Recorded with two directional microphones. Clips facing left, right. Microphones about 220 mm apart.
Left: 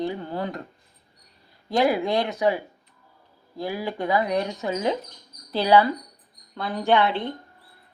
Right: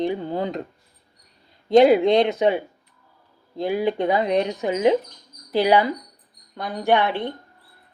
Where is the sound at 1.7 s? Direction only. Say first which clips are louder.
Right 8 dB; 20° right (ahead or behind).